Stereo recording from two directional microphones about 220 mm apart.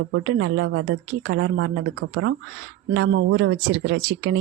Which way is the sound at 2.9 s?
50° right (ahead or behind).